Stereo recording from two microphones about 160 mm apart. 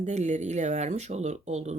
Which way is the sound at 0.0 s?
45° right (ahead or behind).